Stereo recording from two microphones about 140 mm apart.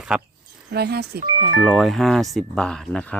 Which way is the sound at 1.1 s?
90° right.